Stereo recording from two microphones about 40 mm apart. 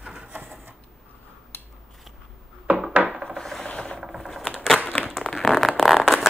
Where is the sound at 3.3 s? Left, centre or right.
Centre.